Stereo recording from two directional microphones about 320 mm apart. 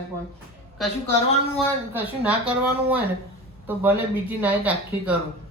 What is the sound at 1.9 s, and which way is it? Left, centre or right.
Speech, centre.